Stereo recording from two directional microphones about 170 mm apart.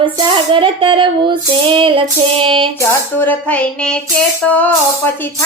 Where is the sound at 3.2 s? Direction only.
10° left (ahead or behind).